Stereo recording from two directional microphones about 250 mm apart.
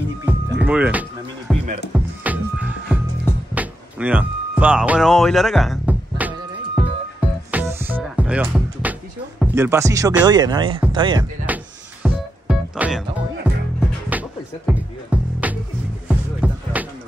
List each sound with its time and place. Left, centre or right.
0.2 s music: centre
9.4 s speech: centre
11.4 s music: centre